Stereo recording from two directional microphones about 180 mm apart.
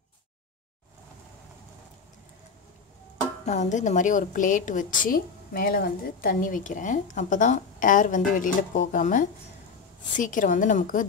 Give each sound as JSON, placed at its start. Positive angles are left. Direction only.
{"t": 3.4, "sound": "a woman's voice", "side_deg": 40}